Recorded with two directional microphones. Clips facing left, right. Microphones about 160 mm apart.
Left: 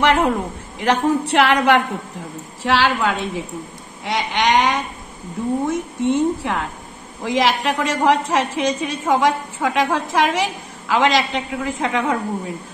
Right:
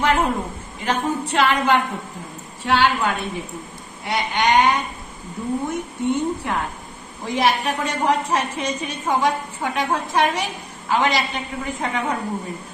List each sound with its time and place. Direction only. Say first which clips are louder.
0.0 s a sound: left 3 dB; 80° left
0.7 s a woman's voice: left 5 dB; 75° left (ahead or behind)
2.6 s a woman's voice: left 1 dB; 90° left